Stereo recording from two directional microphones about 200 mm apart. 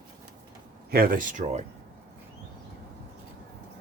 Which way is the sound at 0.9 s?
45° right (ahead or behind).